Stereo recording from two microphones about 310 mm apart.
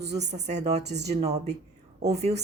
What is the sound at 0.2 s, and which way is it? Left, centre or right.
A woman's voice, right.